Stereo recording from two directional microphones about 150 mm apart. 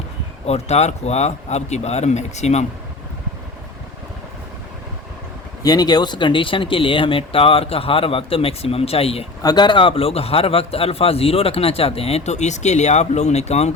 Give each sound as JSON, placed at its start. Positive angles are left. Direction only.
{"t": 0.4, "sound": "speech", "side_deg": 45}
{"t": 5.6, "sound": "a man's voice", "side_deg": 25}
{"t": 9.4, "sound": "a man's voice", "side_deg": 25}